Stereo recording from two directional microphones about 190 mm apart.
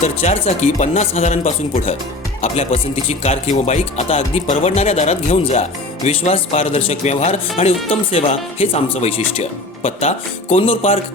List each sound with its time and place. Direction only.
0.0 s speech: 35° left (ahead or behind)